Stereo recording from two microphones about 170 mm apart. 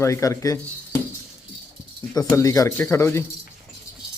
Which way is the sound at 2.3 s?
20° left (ahead or behind).